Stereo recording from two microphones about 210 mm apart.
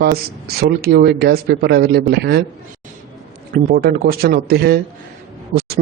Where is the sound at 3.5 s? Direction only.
45° right (ahead or behind).